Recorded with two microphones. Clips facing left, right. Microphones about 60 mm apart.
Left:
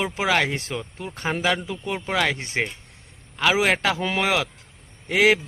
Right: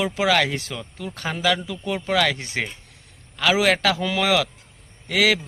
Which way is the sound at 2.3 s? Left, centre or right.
Left.